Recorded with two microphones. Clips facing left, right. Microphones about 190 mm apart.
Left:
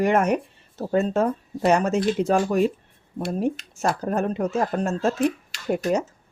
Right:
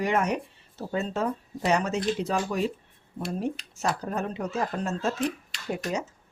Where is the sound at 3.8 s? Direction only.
50° left (ahead or behind).